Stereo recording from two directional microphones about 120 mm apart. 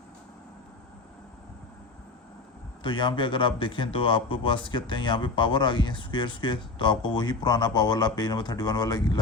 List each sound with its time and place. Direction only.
2.8 s a man's voice: 40° left (ahead or behind)